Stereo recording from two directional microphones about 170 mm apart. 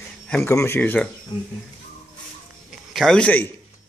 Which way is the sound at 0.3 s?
15° left (ahead or behind).